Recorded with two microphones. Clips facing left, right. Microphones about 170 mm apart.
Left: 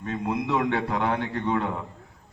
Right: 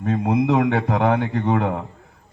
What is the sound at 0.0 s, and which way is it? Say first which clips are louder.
A man's voice: right 8 dB; 65° right (ahead or behind).